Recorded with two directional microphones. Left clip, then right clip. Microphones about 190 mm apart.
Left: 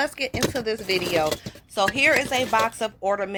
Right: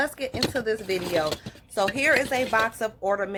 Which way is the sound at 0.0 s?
15° left (ahead or behind).